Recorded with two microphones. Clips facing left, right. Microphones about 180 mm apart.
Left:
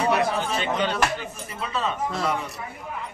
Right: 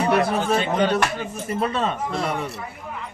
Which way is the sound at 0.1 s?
45° right (ahead or behind).